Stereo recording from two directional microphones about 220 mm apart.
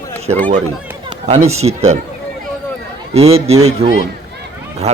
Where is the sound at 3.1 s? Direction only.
30° right (ahead or behind).